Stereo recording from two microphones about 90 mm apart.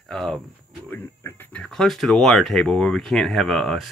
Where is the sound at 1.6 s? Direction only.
5° left (ahead or behind).